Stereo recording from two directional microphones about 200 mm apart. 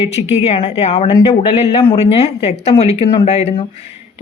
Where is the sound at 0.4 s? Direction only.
35° left (ahead or behind).